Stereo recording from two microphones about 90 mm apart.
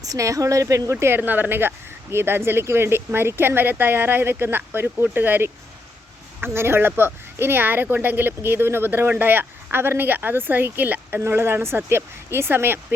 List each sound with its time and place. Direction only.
0.0 s speech: 40° right (ahead or behind)